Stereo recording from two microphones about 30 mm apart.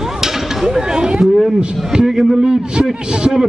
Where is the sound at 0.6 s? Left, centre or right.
Right.